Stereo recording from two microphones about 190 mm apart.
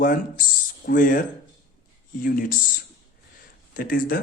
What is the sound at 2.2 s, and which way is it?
Speech, 45° left (ahead or behind).